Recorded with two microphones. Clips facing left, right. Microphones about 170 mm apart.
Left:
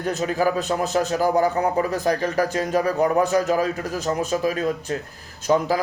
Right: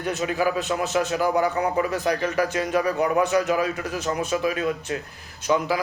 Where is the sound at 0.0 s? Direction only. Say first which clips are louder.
Left 2 dB; 40° left (ahead or behind).